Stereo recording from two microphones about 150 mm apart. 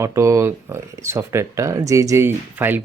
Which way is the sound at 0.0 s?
20° right (ahead or behind).